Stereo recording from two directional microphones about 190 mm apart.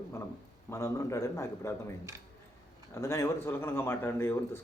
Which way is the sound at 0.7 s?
15° left (ahead or behind).